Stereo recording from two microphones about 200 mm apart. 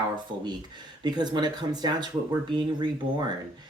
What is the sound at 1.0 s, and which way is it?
Speech, 20° right (ahead or behind).